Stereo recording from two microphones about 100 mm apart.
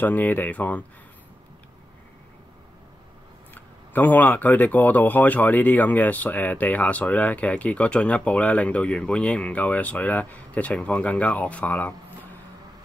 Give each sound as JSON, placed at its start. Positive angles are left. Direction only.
{"t": 0.0, "sound": "speech", "side_deg": 15}
{"t": 3.5, "sound": "speech", "side_deg": 20}